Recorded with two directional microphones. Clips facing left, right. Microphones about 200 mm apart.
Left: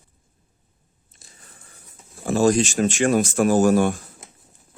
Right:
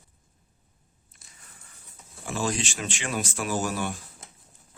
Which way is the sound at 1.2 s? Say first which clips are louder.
Left 6 dB; 30° left (ahead or behind).